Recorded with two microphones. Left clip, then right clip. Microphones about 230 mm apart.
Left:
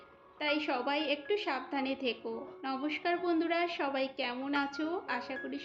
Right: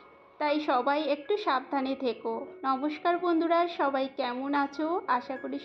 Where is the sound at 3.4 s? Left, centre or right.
Right.